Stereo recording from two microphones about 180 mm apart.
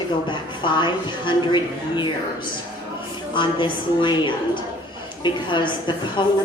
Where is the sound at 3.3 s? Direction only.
25° left (ahead or behind).